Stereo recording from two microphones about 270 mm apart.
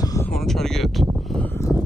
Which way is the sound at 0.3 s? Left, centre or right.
Centre.